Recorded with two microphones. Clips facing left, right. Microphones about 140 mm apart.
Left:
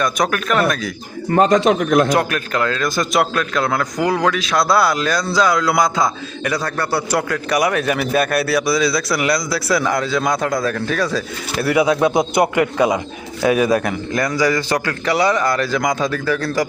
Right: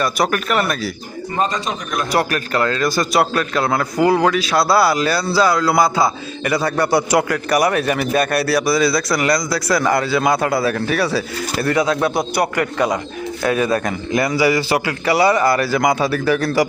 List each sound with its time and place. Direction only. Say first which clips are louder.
0.0 s a man's voice: even; 5° right (ahead or behind)
1.4 s speech: left 8 dB; 90° left
2.1 s a man's voice: even; 5° right (ahead or behind)
7.3 s a man's voice: right 1 dB; centre (ahead or behind)
11.6 s a man's voice: left 3 dB; 10° left (ahead or behind)
14.1 s speech: right 2 dB; 10° right (ahead or behind)